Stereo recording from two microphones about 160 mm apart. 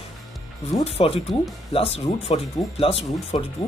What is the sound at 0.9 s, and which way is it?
Speech, 40° left (ahead or behind).